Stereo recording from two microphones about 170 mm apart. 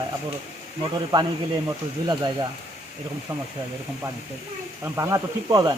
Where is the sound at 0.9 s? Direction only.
25° right (ahead or behind).